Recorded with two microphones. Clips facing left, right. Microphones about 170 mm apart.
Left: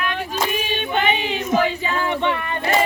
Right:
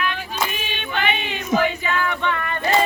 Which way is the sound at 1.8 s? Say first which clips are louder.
Left 2 dB; 30° left (ahead or behind).